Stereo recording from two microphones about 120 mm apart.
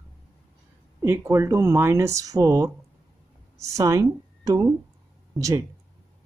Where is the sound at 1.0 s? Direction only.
25° right (ahead or behind).